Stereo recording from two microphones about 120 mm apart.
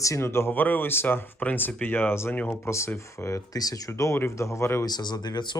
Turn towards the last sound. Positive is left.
turn(degrees=40)  # may be behind; listen again after turning